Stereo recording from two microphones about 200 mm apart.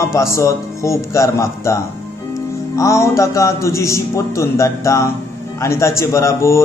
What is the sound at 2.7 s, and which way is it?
Speech, 15° left (ahead or behind).